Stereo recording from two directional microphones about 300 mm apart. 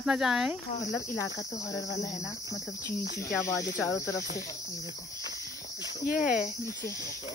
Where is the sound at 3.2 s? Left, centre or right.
Left.